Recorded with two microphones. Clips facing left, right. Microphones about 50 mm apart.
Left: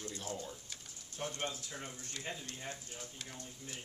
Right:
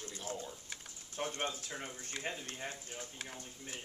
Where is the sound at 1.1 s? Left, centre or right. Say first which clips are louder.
Right 2 dB; right.